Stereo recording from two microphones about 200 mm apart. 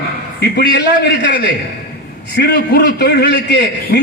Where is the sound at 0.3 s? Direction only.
55° left (ahead or behind).